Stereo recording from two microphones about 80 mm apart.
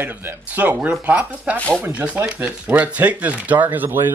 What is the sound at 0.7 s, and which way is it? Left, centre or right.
Speech, centre.